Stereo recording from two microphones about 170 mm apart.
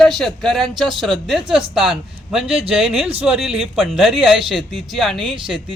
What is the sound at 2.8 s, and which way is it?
Speech, 35° right (ahead or behind).